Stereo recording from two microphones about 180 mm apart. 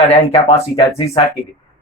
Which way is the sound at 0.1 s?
35° left (ahead or behind).